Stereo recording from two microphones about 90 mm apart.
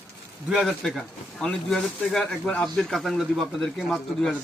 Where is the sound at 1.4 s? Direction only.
5° left (ahead or behind).